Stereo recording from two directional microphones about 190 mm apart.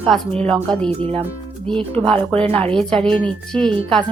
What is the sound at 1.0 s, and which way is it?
Speech, 30° right (ahead or behind).